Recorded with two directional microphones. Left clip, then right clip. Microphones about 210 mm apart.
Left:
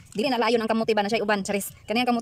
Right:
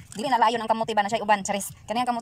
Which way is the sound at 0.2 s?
10° left (ahead or behind).